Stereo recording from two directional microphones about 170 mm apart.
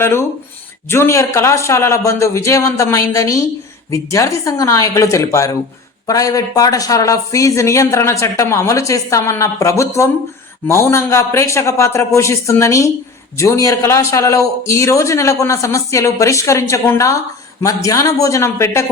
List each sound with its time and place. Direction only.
0.0 s a man's voice: 15° left (ahead or behind)